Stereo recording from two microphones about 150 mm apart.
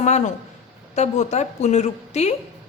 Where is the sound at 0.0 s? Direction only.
50° left (ahead or behind).